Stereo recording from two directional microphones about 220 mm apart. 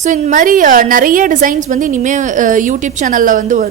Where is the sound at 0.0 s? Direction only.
35° right (ahead or behind).